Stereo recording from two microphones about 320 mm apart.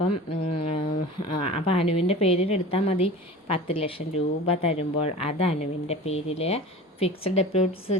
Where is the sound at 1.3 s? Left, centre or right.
Left.